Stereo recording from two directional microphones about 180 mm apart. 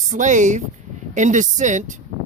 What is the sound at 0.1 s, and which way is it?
Speech, 45° right (ahead or behind).